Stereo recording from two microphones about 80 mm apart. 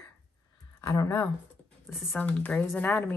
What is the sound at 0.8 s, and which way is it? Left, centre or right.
Speech, left.